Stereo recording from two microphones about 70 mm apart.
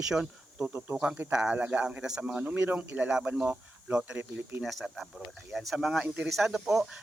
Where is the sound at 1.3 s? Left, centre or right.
Centre.